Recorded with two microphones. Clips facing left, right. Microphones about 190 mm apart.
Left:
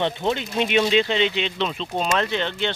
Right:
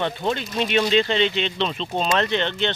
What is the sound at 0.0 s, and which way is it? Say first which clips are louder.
Speech: left 1 dB; 20° left (ahead or behind).